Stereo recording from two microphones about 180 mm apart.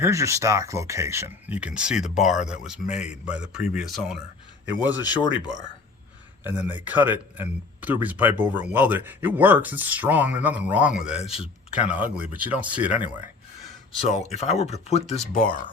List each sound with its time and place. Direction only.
0.0 s speech: 15° right (ahead or behind)
4.9 s speech: 20° left (ahead or behind)
6.4 s speech: 10° right (ahead or behind)
14.1 s speech: 40° left (ahead or behind)